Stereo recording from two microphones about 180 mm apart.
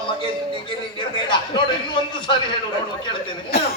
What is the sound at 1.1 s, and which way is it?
A man's voice, 25° left (ahead or behind).